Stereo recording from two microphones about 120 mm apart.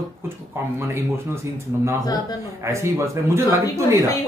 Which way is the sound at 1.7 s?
20° right (ahead or behind).